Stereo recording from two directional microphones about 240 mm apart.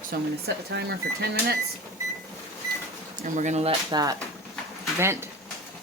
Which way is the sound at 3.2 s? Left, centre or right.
Right.